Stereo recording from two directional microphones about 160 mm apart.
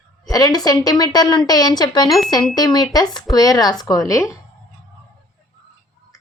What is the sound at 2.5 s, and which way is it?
A woman's voice, 25° left (ahead or behind).